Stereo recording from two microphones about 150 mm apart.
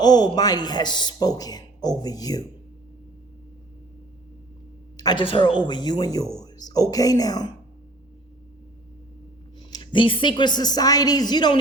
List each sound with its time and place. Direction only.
0.0 s a man's voice: 25° left (ahead or behind)
4.9 s a man's voice: 30° left (ahead or behind)
9.6 s a man's voice: 25° left (ahead or behind)